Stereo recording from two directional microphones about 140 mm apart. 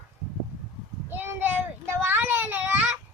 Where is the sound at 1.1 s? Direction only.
15° right (ahead or behind).